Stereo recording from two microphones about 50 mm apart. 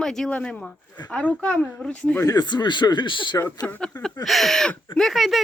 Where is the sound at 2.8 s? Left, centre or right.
Left.